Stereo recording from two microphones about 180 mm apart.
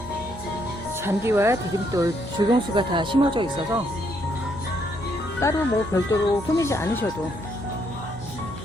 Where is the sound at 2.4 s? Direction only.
25° right (ahead or behind).